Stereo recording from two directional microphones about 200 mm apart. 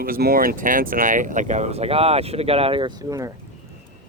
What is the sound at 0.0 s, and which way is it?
Speech, 45° right (ahead or behind).